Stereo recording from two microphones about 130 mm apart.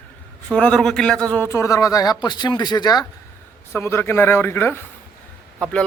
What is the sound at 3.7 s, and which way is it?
Speech, 20° left (ahead or behind).